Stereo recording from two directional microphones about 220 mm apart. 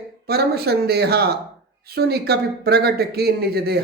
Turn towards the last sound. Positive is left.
turn(degrees=-45)  # may be behind; listen again after turning